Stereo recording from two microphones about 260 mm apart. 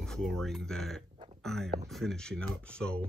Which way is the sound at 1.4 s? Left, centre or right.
Centre.